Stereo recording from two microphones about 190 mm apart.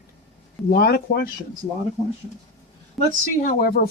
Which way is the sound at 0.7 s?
55° left (ahead or behind).